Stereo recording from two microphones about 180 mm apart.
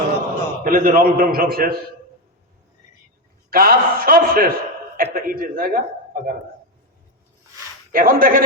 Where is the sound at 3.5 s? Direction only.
55° right (ahead or behind).